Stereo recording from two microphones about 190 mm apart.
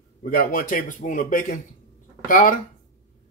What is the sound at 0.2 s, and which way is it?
Speech, 50° left (ahead or behind).